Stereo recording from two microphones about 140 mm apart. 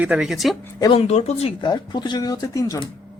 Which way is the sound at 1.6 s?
35° left (ahead or behind).